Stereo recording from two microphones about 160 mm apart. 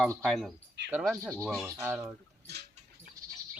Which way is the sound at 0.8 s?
90° right.